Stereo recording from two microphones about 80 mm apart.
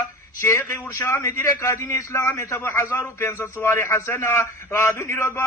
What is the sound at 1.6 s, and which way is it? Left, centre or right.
A man's voice, left.